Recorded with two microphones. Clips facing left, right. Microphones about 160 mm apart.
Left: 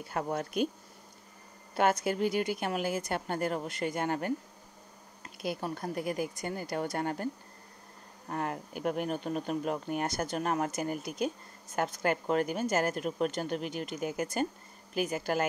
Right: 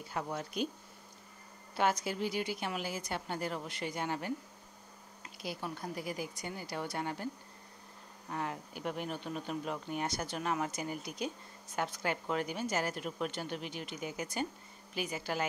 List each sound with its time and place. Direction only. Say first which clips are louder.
0.1 s speech: left 5 dB; 50° left (ahead or behind)
1.8 s speech: left 5 dB; 50° left (ahead or behind)
8.3 s speech: left 4 dB; 50° left (ahead or behind)